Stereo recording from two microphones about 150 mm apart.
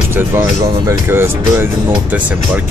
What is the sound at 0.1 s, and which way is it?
Speech, 15° right (ahead or behind).